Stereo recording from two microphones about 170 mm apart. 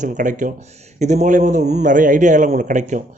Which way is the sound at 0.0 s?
45° right (ahead or behind).